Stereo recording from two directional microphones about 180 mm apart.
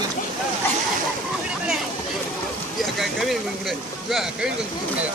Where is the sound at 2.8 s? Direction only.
Centre (ahead or behind).